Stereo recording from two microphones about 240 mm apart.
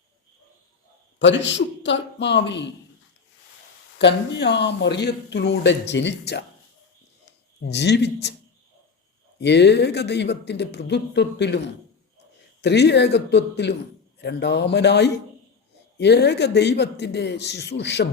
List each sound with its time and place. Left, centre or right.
1.2 s speech: left
3.9 s speech: left
7.6 s speech: left
9.4 s speech: left
12.6 s speech: left